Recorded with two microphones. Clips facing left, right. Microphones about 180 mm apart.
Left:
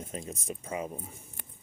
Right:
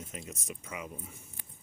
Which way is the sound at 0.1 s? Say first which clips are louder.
Left 5 dB; 30° left (ahead or behind).